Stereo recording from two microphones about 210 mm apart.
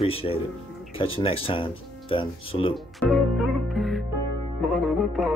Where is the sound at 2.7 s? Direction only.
Centre (ahead or behind).